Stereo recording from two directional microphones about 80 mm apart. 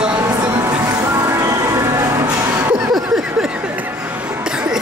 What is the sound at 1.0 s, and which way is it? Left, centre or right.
Music, right.